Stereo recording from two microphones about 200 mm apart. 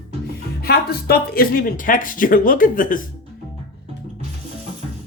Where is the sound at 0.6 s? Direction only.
50° left (ahead or behind).